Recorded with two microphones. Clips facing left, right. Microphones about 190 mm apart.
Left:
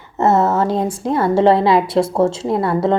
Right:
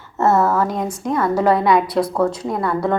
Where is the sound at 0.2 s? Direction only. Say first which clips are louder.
Left 1 dB; 20° left (ahead or behind).